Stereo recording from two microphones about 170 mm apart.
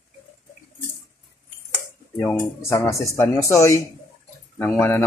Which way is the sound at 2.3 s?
15° left (ahead or behind).